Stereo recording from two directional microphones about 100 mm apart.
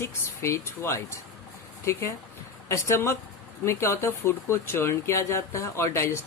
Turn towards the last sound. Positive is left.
turn(degrees=30)  # may be behind; listen again after turning